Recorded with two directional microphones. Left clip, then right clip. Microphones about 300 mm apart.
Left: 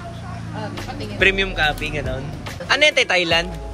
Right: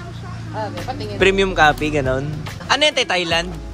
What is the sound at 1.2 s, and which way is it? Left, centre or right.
Speech, centre.